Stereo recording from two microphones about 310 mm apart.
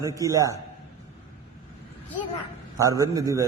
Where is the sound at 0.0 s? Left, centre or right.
Centre.